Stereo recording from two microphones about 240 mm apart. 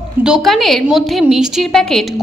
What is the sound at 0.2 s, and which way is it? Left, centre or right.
A woman's voice, centre.